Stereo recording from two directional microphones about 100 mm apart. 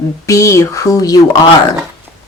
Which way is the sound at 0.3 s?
35° left (ahead or behind).